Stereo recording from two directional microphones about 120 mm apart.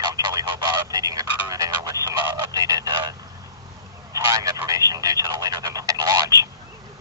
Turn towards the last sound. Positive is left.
turn(degrees=-30)  # may be behind; listen again after turning